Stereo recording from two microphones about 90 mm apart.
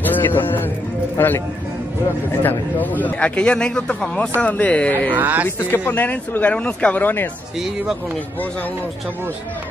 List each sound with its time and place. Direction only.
0.0 s music: 20° left (ahead or behind)
1.1 s speech: 20° left (ahead or behind)
2.4 s a man's voice: 20° left (ahead or behind)
5.1 s speech: 20° right (ahead or behind)
5.6 s speech: 20° left (ahead or behind)